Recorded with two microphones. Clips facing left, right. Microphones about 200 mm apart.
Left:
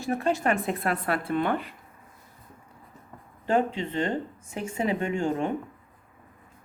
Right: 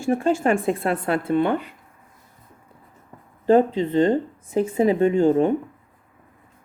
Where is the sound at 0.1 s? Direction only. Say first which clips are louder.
Right 6 dB; 30° right (ahead or behind).